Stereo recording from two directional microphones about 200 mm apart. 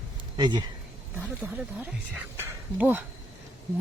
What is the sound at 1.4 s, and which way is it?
Speech, 10° right (ahead or behind).